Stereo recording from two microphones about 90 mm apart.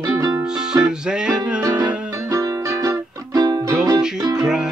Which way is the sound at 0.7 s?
10° right (ahead or behind).